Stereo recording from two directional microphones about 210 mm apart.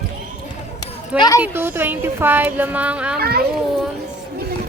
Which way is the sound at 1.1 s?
20° left (ahead or behind).